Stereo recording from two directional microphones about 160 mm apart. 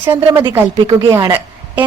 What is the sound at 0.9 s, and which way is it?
Speech, 25° right (ahead or behind).